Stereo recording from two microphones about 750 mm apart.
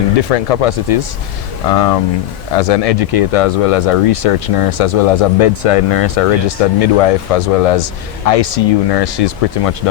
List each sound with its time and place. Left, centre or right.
0.3 s speech: left